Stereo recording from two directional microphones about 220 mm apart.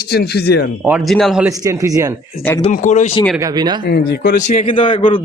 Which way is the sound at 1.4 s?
15° right (ahead or behind).